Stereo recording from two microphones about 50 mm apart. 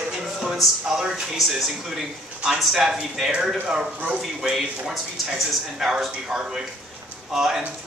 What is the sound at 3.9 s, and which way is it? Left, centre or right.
Speech, right.